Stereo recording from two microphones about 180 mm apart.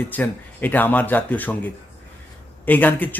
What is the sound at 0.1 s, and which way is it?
Speech, 10° left (ahead or behind).